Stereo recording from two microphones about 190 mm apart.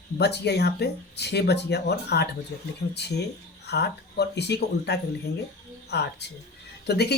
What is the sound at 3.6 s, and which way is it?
Speech, 60° left (ahead or behind).